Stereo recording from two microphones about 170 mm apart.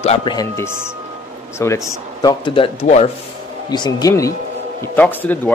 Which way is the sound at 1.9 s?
25° left (ahead or behind).